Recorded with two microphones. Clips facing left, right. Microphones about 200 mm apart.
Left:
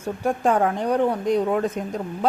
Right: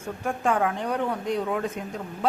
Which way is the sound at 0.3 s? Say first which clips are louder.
Left 4 dB; 40° left (ahead or behind).